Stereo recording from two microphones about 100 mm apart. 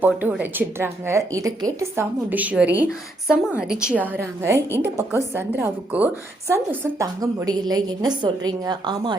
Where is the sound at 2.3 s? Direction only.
15° right (ahead or behind).